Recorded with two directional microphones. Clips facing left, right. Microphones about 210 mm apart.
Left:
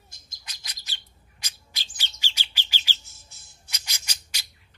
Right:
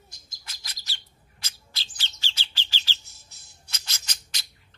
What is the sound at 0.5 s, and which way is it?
Bird, 20° left (ahead or behind).